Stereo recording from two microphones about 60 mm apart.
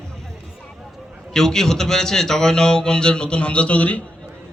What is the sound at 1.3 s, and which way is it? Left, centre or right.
Speech, centre.